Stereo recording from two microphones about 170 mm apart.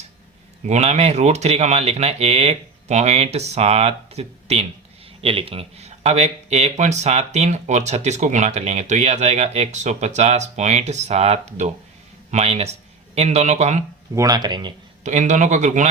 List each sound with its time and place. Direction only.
0.6 s speech: 40° right (ahead or behind)
14.2 s speech: 20° right (ahead or behind)
15.0 s speech: 45° right (ahead or behind)